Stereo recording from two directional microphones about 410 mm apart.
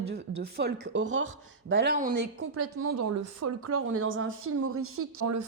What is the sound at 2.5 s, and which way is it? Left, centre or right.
Speech, right.